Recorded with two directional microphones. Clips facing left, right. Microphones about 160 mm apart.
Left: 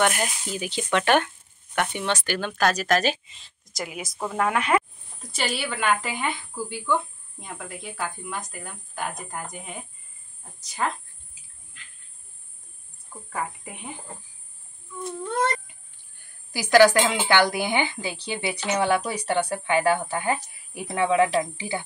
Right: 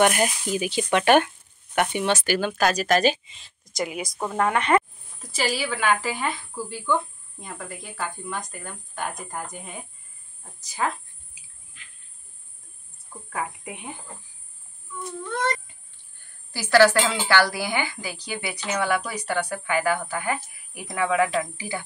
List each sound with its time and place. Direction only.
0.0 s a woman's voice: 15° right (ahead or behind)
13.3 s a woman's voice: centre (ahead or behind)
16.5 s speech: 15° left (ahead or behind)